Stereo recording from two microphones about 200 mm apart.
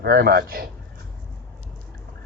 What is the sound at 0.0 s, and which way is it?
Speech, 50° right (ahead or behind).